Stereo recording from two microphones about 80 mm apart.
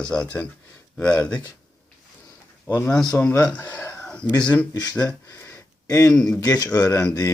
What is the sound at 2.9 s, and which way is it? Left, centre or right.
Speech, centre.